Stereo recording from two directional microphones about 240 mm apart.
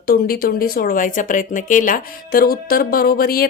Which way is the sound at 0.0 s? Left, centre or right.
Left.